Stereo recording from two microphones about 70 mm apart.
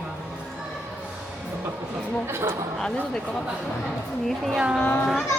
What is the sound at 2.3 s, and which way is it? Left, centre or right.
Speech, right.